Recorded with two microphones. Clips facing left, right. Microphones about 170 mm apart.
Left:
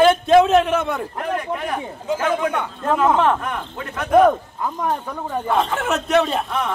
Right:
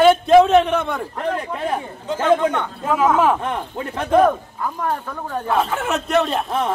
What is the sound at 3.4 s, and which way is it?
Speech, 30° right (ahead or behind).